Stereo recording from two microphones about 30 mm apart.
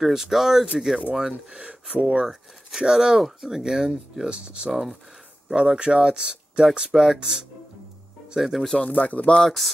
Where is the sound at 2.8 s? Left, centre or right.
Right.